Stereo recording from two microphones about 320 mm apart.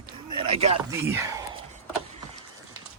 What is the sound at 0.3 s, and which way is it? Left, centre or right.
Speech, centre.